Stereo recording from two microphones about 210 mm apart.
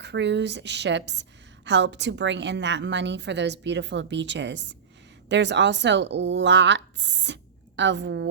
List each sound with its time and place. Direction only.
0.0 s a woman's voice: 55° right (ahead or behind)